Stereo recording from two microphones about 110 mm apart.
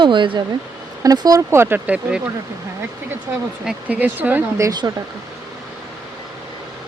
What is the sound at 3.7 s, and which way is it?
Speech, 15° right (ahead or behind).